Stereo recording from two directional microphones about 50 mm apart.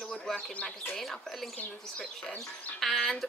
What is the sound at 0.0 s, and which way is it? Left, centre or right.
Bird, centre.